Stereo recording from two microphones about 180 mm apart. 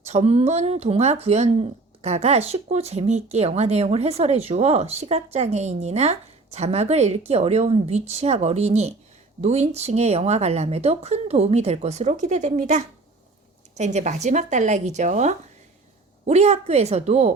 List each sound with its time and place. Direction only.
0.1 s speech: 35° right (ahead or behind)